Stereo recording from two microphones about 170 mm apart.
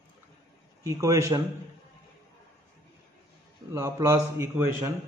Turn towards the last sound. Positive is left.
turn(degrees=-15)  # may be behind; listen again after turning